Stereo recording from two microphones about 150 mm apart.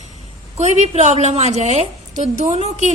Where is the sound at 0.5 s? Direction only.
45° right (ahead or behind).